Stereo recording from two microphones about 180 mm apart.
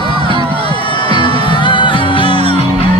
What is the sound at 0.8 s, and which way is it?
Music, 25° left (ahead or behind).